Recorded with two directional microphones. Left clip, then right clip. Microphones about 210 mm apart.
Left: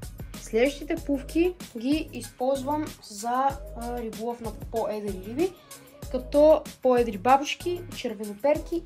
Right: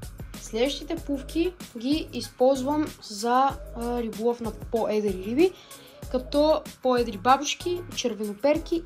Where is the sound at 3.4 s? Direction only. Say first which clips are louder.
Right 1 dB; 20° right (ahead or behind).